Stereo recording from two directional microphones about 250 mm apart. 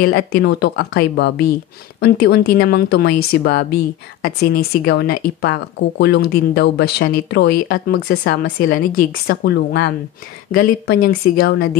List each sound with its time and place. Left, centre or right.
0.0 s speech: left